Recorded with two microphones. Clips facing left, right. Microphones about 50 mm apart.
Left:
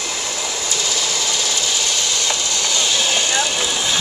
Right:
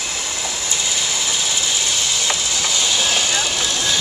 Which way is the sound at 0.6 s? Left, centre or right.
Centre.